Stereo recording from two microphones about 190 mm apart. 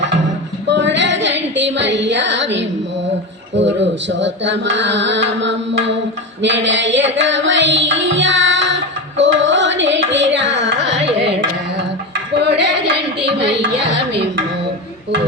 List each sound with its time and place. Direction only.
0.7 s female singing: 70° right (ahead or behind)
3.6 s music: 70° right (ahead or behind)
11.0 s carnatic music: 30° right (ahead or behind)
12.4 s a sound: 65° right (ahead or behind)
13.2 s speech: 65° right (ahead or behind)